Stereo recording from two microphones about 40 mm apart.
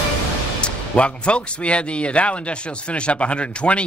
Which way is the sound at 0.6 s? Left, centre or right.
Left.